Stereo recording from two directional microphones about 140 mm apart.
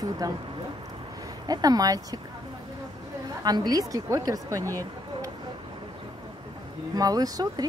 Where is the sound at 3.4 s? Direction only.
30° right (ahead or behind).